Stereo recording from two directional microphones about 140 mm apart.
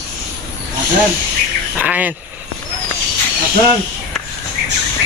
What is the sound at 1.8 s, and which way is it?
Speech, 10° right (ahead or behind).